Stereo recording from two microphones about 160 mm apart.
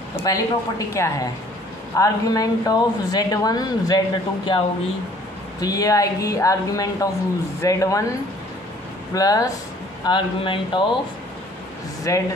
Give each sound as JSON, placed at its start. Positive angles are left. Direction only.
{"t": 0.2, "sound": "speech", "side_deg": 20}
{"t": 9.1, "sound": "speech", "side_deg": 20}
{"t": 12.1, "sound": "speech", "side_deg": 20}